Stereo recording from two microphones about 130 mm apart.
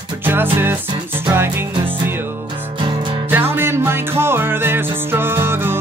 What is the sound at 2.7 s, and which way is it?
Music, 40° right (ahead or behind).